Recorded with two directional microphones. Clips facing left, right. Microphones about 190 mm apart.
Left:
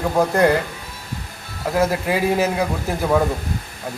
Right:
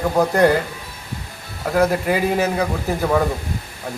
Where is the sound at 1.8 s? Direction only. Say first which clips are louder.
Right 2 dB; 5° left (ahead or behind).